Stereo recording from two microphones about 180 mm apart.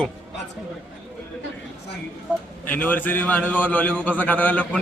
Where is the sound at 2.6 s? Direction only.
10° left (ahead or behind).